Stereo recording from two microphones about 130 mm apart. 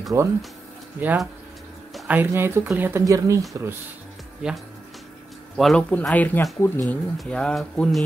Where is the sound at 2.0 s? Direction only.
15° right (ahead or behind).